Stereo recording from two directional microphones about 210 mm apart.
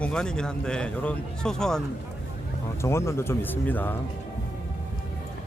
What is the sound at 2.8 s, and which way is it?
Speech, 15° left (ahead or behind).